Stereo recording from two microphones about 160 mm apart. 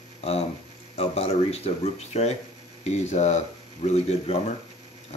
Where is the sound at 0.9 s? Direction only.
40° left (ahead or behind).